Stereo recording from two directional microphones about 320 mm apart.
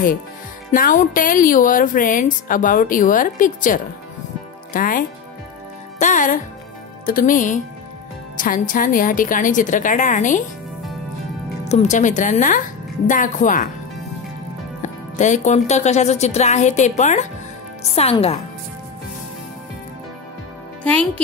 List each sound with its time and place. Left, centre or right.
0.7 s speech: left
11.7 s speech: left
14.8 s speech: left
20.8 s a woman's voice: centre